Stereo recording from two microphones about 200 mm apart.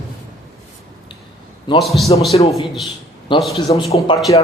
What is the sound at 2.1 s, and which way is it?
Speech, 25° left (ahead or behind).